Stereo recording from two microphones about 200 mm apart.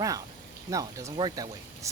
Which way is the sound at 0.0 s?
15° right (ahead or behind).